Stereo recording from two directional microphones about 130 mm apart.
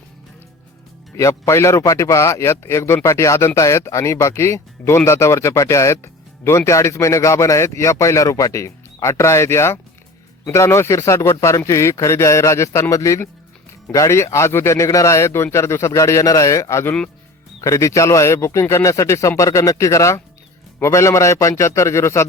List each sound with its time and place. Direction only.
1.1 s speech: 20° left (ahead or behind)